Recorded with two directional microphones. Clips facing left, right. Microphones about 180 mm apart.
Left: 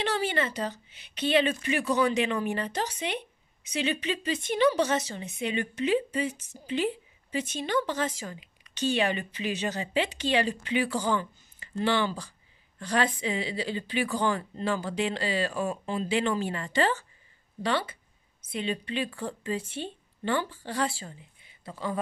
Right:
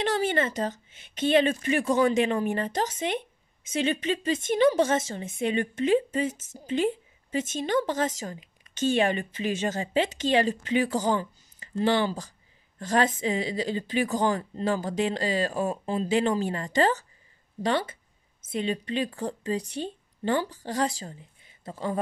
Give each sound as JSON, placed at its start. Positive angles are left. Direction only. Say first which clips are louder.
{"t": 0.0, "sound": "a woman's voice", "louder": "right 3 dB", "side_deg": -45}